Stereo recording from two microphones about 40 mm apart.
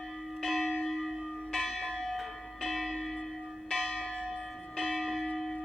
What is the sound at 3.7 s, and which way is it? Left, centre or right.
Church bell, centre.